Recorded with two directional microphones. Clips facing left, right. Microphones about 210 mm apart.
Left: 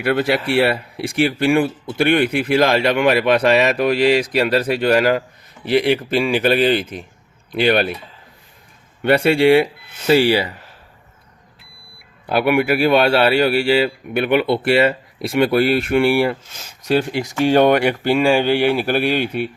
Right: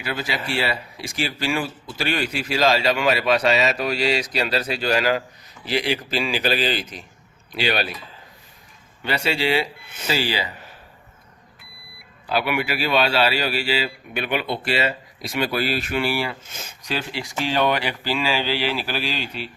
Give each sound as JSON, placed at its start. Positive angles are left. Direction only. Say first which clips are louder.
{"t": 0.0, "sound": "speech", "louder": "left 10 dB", "side_deg": 60}
{"t": 9.0, "sound": "speech", "louder": "left 10 dB", "side_deg": 55}
{"t": 12.2, "sound": "speech", "louder": "left 7 dB", "side_deg": 55}